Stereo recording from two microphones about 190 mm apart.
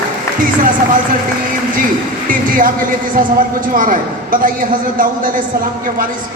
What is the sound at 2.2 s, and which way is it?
A woman's voice, 45° right (ahead or behind).